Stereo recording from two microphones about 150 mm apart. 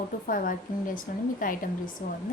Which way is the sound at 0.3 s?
70° left (ahead or behind).